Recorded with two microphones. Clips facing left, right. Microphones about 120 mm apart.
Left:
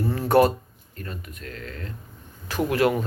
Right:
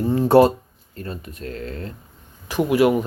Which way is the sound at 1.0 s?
35° right (ahead or behind).